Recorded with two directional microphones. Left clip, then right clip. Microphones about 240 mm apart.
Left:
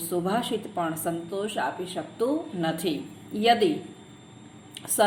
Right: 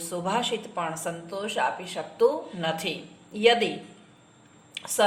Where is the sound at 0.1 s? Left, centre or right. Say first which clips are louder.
Even; left.